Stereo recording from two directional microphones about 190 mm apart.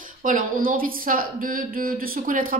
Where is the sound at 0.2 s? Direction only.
45° right (ahead or behind).